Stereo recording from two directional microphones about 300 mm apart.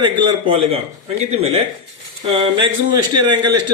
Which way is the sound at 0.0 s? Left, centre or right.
Centre.